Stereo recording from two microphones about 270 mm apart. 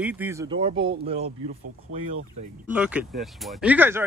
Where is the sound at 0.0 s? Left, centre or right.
Centre.